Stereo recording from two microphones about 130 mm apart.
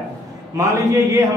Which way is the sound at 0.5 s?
25° right (ahead or behind).